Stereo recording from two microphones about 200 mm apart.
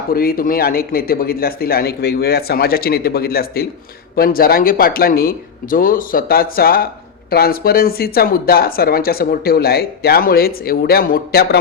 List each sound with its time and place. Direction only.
0.1 s speech: 50° left (ahead or behind)